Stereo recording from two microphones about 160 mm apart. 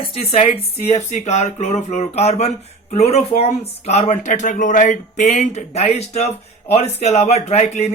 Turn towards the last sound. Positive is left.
turn(degrees=45)  # may be behind; listen again after turning